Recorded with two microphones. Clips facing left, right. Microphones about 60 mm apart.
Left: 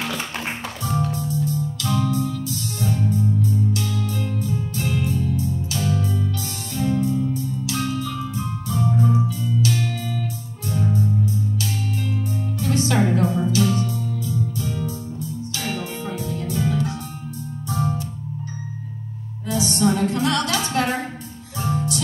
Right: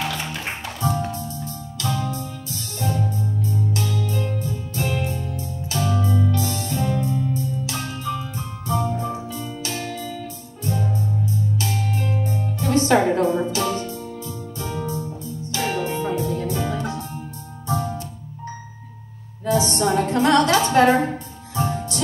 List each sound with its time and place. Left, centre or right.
0.8 s music: right
12.5 s music: right
19.4 s music: right
19.9 s a sound: right
21.5 s music: right